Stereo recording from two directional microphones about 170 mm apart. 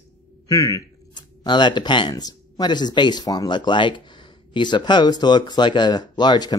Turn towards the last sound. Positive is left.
turn(degrees=25)  # may be behind; listen again after turning